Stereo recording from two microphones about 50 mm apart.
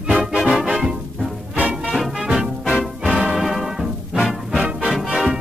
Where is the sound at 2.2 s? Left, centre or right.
Centre.